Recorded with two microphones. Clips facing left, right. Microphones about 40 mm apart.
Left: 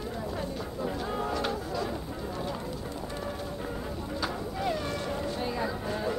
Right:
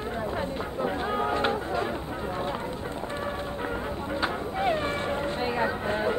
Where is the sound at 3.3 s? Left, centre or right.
Right.